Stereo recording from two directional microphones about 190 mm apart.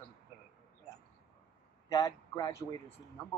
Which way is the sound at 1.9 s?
15° left (ahead or behind).